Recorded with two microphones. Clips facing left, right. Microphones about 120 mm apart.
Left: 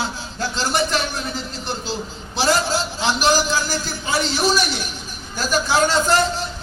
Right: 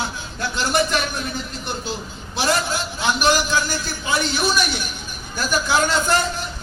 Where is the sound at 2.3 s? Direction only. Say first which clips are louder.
Left 2 dB; 30° left (ahead or behind).